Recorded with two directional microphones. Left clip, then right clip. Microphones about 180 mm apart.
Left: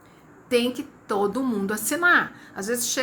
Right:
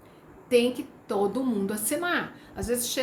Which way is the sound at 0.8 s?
5° right (ahead or behind).